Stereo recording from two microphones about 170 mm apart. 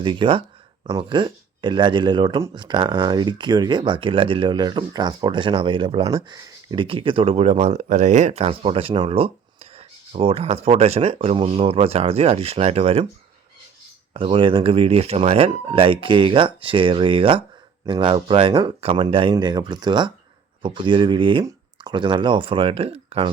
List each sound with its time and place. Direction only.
0.0 s speech: 30° right (ahead or behind)
14.1 s speech: 30° right (ahead or behind)